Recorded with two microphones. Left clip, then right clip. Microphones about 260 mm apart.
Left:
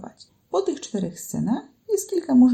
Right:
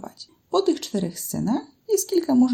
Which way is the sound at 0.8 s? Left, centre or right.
Right.